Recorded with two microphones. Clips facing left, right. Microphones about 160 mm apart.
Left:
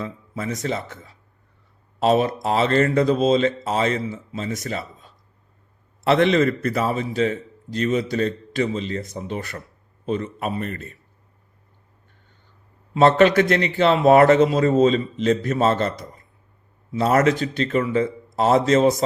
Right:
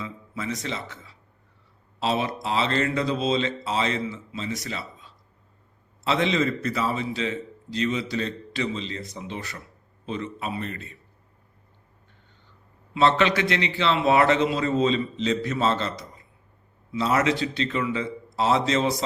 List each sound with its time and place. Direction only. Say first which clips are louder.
0.0 s a man's voice: left 4 dB; 50° left (ahead or behind)
12.9 s a man's voice: left 6 dB; 50° left (ahead or behind)